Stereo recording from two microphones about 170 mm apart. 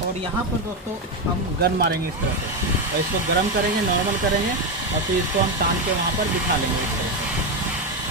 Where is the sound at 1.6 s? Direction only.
70° right (ahead or behind).